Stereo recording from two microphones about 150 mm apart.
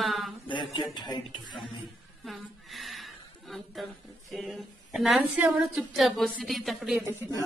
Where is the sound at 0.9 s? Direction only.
30° left (ahead or behind).